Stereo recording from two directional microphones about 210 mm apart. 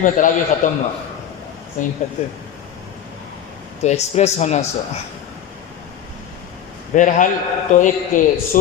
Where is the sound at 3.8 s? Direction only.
30° left (ahead or behind).